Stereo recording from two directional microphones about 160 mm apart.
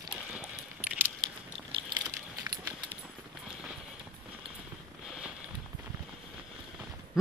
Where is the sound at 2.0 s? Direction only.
20° right (ahead or behind).